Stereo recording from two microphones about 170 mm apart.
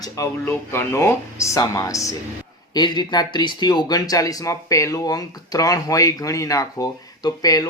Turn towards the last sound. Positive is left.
turn(degrees=20)  # may be behind; listen again after turning